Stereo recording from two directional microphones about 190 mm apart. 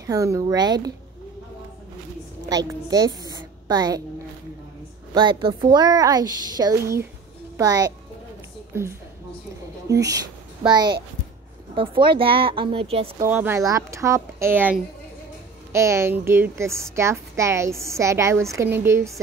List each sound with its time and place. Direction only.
0.0 s a woman's voice: 15° right (ahead or behind)
2.5 s a woman's voice: 20° right (ahead or behind)
5.1 s a woman's voice: 25° right (ahead or behind)
9.8 s a woman's voice: 20° right (ahead or behind)
13.2 s a woman's voice: 10° right (ahead or behind)